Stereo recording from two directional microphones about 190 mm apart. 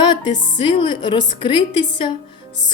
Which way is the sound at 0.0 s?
25° left (ahead or behind).